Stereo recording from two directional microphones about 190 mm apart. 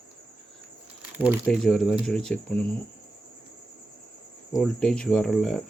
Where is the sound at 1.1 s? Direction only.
10° right (ahead or behind).